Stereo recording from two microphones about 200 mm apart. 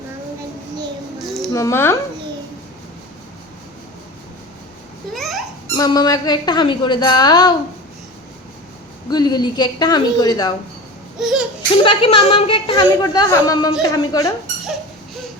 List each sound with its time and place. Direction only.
1.2 s music: centre (ahead or behind)
1.5 s a woman's voice: 15° left (ahead or behind)
5.1 s a sound: centre (ahead or behind)
5.7 s a woman's voice: 20° left (ahead or behind)
9.0 s a woman's voice: 20° left (ahead or behind)
11.2 s a sound: centre (ahead or behind)
11.8 s a woman's voice: 25° left (ahead or behind)